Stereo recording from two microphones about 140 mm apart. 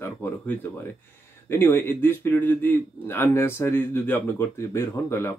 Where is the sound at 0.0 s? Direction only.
15° left (ahead or behind).